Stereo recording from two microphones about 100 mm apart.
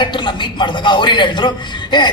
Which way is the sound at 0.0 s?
50° left (ahead or behind).